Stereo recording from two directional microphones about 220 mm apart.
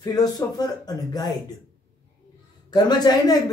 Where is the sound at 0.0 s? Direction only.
15° left (ahead or behind).